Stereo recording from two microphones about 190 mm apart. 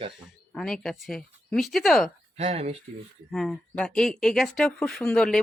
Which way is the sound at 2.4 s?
35° right (ahead or behind).